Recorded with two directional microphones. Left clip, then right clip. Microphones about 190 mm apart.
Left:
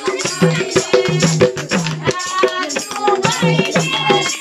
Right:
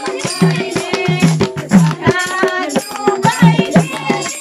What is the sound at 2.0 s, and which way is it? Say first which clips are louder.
Music: even; 45° right (ahead or behind).